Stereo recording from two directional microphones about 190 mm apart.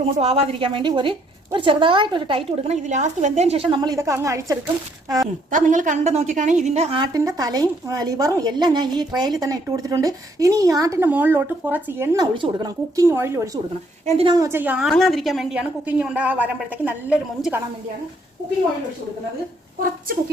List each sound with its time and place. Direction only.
0.0 s a woman's voice: 30° right (ahead or behind)
3.7 s a woman's voice: 20° right (ahead or behind)
5.5 s a woman's voice: 45° right (ahead or behind)
7.0 s a woman's voice: 20° right (ahead or behind)
12.1 s a woman's voice: 25° right (ahead or behind)
14.2 s a woman's voice: 25° right (ahead or behind)
14.4 s a woman's voice: 10° right (ahead or behind)